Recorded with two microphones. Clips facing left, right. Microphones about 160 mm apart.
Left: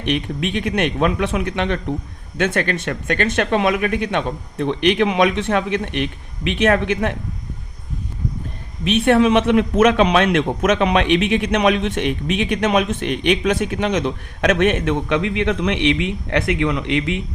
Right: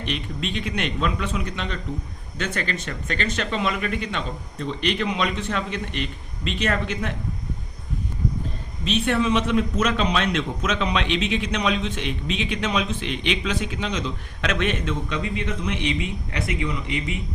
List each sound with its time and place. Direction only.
0.0 s a man's voice: 60° left (ahead or behind)
8.8 s a man's voice: 60° left (ahead or behind); by 17.2 s 80° left